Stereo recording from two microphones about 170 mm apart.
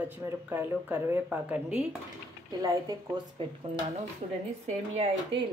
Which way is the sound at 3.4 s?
30° right (ahead or behind).